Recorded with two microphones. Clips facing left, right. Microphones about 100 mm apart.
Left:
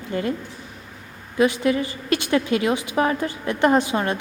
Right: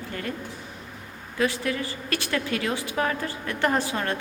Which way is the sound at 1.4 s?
20° left (ahead or behind).